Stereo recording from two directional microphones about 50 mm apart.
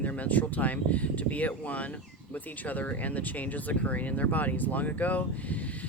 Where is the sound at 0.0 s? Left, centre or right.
Left.